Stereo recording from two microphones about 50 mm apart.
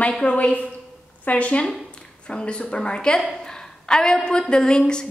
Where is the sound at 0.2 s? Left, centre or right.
Left.